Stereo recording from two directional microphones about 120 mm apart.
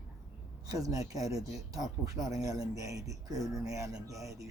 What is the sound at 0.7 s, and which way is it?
Speech, 30° right (ahead or behind).